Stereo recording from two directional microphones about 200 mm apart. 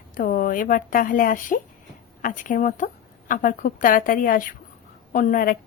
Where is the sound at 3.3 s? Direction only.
40° left (ahead or behind).